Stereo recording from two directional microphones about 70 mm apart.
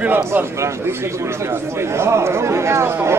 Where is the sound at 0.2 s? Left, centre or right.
Right.